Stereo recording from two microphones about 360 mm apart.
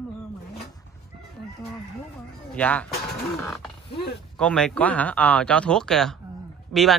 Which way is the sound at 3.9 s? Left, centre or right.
Left.